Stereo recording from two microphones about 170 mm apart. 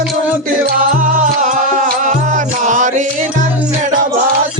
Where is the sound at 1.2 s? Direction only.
50° right (ahead or behind).